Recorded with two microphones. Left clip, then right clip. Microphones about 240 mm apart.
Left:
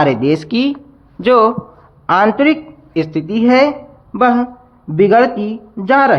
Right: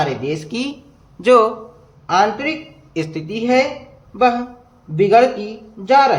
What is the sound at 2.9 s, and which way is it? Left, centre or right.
Speech, centre.